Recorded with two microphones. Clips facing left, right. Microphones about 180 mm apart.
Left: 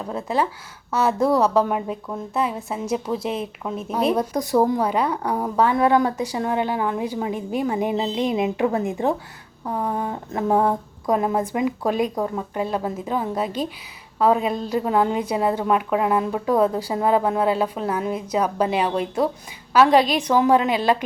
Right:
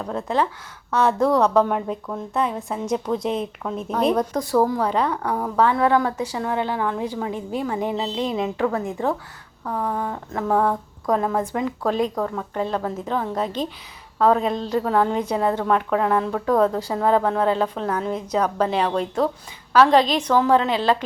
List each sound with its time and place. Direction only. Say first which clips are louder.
0.0 s a woman's voice: even; 5° left (ahead or behind)